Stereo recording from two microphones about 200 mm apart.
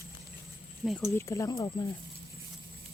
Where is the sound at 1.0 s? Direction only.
15° left (ahead or behind).